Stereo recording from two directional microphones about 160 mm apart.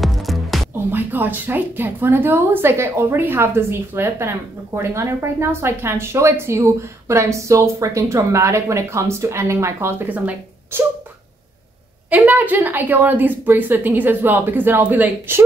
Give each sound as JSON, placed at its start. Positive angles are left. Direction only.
{"t": 0.0, "sound": "music", "side_deg": 0}
{"t": 0.9, "sound": "a woman's voice", "side_deg": -10}
{"t": 12.1, "sound": "a woman's voice", "side_deg": -10}